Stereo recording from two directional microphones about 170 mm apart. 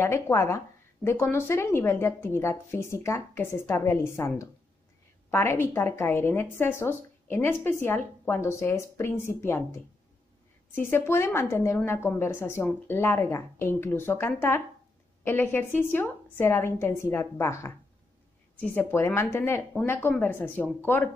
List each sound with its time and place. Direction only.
0.0 s speech: 15° left (ahead or behind)